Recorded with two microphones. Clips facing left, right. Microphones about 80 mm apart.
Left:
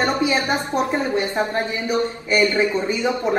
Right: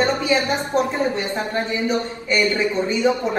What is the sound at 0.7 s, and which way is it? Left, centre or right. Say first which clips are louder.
Speech: right 3 dB; right.